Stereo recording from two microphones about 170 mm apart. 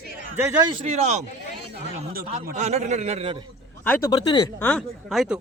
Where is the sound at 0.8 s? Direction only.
40° right (ahead or behind).